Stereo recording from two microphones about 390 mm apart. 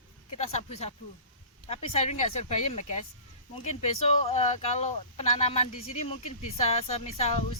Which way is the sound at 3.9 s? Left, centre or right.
Centre.